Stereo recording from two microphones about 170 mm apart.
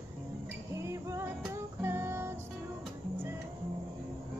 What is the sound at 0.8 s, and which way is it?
Music, 15° right (ahead or behind).